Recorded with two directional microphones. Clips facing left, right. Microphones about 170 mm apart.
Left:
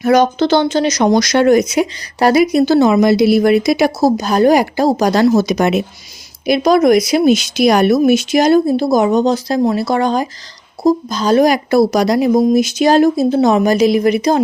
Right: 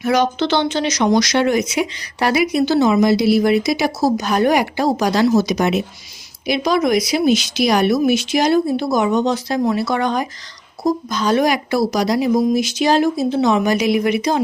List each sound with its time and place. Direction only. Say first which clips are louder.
0.0 s speech: left 5 dB; 45° left (ahead or behind)
4.2 s speech: left 6 dB; 35° left (ahead or behind)